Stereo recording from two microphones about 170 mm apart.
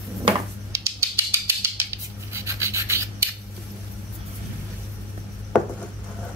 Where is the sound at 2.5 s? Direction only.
15° right (ahead or behind).